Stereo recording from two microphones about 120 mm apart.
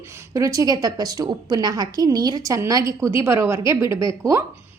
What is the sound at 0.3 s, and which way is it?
A woman's voice, 30° right (ahead or behind).